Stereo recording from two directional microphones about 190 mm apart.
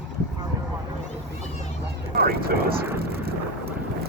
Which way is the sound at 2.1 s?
55° right (ahead or behind).